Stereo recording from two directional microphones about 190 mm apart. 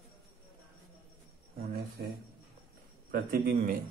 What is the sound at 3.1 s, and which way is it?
Speech, 55° right (ahead or behind).